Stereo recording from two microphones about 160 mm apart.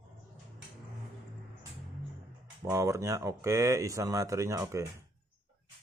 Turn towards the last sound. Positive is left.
turn(degrees=-15)  # may be behind; listen again after turning